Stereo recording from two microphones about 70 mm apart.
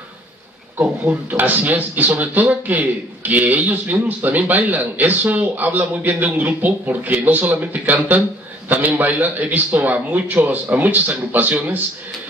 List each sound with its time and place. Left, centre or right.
0.7 s speech: right